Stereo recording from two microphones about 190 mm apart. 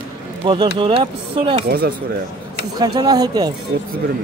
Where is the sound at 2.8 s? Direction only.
20° right (ahead or behind).